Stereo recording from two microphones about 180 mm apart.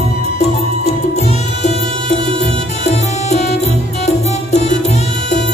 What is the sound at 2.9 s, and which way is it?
Music, 40° left (ahead or behind).